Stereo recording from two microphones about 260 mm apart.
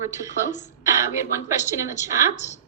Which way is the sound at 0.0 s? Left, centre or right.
Centre.